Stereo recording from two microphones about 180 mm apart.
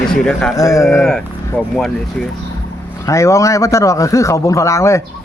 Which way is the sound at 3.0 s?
15° left (ahead or behind).